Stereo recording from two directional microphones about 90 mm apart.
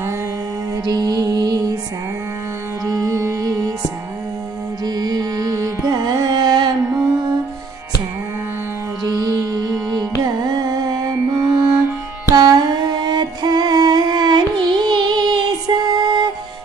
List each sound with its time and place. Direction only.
0.8 s music: 50° right (ahead or behind)
2.9 s music: 40° right (ahead or behind)
4.8 s carnatic music: 50° right (ahead or behind)
9.8 s carnatic music: 50° right (ahead or behind)
12.4 s music: 50° right (ahead or behind)